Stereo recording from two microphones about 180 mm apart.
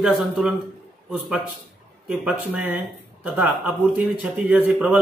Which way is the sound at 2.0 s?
5° right (ahead or behind).